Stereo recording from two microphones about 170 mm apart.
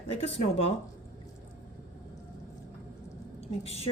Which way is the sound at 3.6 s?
35° left (ahead or behind).